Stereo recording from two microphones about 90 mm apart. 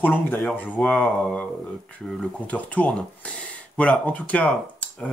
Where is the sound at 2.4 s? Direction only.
15° left (ahead or behind).